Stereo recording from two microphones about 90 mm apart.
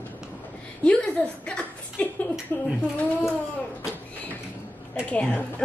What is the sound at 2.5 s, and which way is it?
Speech, 20° left (ahead or behind).